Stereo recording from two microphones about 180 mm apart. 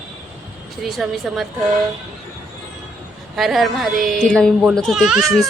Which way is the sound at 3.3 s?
Centre (ahead or behind).